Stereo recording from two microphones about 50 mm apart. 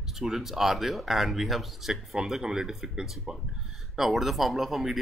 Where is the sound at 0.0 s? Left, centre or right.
Centre.